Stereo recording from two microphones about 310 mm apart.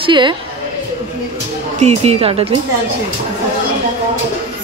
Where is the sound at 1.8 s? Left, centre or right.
Centre.